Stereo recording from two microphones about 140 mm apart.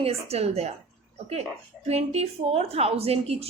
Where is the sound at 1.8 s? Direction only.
50° right (ahead or behind).